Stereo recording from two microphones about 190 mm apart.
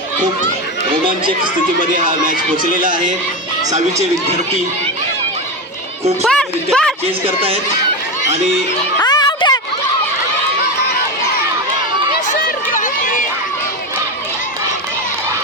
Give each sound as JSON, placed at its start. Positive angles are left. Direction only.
{"t": 1.8, "sound": "speech", "side_deg": -45}
{"t": 6.2, "sound": "a woman's voice", "side_deg": 5}
{"t": 7.3, "sound": "speech", "side_deg": -30}
{"t": 9.0, "sound": "a sound", "side_deg": 20}
{"t": 12.4, "sound": "run", "side_deg": 45}